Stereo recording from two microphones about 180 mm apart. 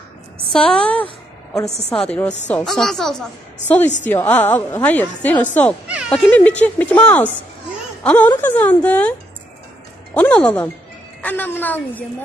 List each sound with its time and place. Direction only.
0.5 s a woman's voice: 5° left (ahead or behind)
1.7 s a woman's voice: 35° left (ahead or behind)
2.0 s a woman's voice: 5° left (ahead or behind)
10.1 s a woman's voice: 10° left (ahead or behind)